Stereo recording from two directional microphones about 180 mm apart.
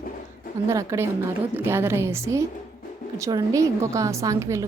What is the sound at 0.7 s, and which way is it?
A woman's voice, 15° right (ahead or behind).